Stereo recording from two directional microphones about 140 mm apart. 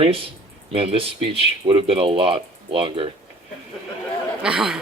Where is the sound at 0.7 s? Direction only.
40° right (ahead or behind).